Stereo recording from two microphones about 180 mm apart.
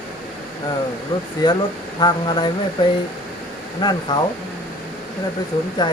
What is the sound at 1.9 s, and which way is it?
Speech, 25° left (ahead or behind).